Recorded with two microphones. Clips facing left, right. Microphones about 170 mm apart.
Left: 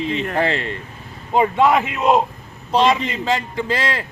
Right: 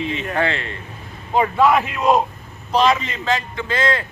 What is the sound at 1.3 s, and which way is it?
Speech, 20° left (ahead or behind).